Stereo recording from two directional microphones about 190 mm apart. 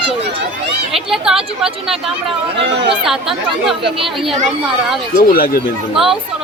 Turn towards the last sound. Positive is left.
turn(degrees=0)  # may be behind; listen again after turning